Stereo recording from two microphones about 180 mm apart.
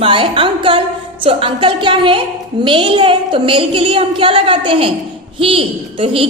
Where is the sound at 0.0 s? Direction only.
30° right (ahead or behind).